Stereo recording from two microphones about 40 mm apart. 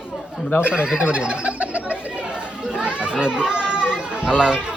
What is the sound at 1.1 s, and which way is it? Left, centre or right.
Fowl, right.